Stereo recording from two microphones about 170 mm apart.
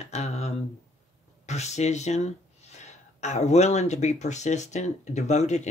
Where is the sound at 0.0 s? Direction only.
40° left (ahead or behind).